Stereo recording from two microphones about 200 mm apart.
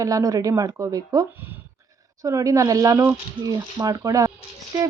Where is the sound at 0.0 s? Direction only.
15° right (ahead or behind).